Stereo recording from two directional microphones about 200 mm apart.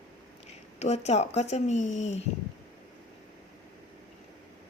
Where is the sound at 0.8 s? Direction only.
35° left (ahead or behind).